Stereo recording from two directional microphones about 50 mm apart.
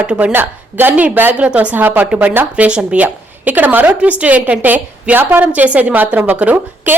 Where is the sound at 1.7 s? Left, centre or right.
Right.